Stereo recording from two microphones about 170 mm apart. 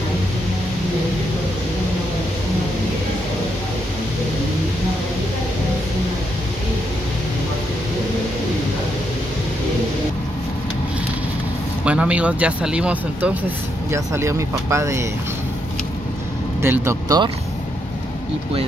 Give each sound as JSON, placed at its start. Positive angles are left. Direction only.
{"t": 11.8, "sound": "speech", "side_deg": -5}
{"t": 16.6, "sound": "speech", "side_deg": -15}